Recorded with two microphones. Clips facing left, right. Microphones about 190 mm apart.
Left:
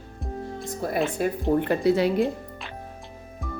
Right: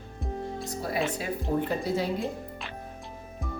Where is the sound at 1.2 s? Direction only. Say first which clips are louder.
Left 7 dB; 50° left (ahead or behind).